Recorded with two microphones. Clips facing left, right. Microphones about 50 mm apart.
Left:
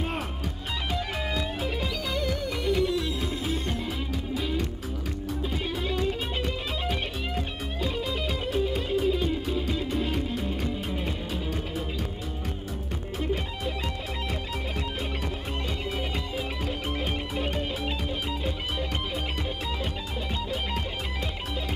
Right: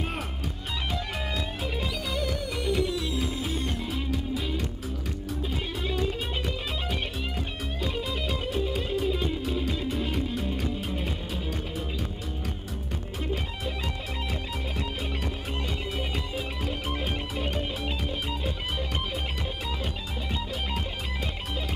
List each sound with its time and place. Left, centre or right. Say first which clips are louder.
0.9 s music: left 4 dB; centre
13.2 s music: left 3 dB; centre
16.0 s music: left 1 dB; centre